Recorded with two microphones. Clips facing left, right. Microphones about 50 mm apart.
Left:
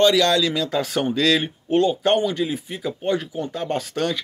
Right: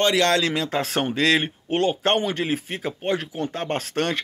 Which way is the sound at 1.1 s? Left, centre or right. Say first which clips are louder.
Even; right.